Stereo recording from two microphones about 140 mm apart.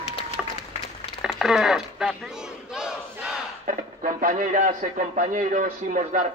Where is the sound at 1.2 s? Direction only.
5° right (ahead or behind).